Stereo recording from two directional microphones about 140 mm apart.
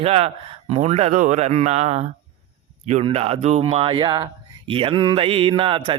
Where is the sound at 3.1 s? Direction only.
45° right (ahead or behind).